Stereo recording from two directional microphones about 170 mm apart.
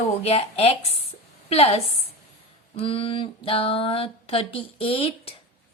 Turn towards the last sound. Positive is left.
turn(degrees=35)  # may be behind; listen again after turning